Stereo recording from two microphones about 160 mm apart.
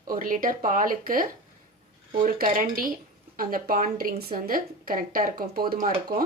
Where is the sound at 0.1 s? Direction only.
60° right (ahead or behind).